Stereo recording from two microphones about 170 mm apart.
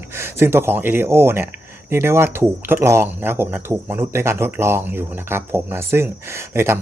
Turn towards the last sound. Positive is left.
turn(degrees=-15)  # may be behind; listen again after turning